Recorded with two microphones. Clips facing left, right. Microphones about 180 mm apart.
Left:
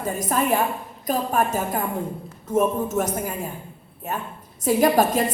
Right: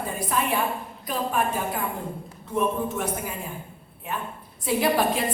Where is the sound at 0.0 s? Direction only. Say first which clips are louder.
Left 4 dB; 45° left (ahead or behind).